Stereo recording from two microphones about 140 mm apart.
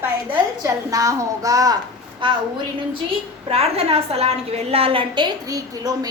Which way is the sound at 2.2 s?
35° right (ahead or behind).